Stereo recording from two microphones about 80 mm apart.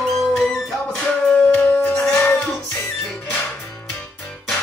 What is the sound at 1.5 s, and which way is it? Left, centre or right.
Music, centre.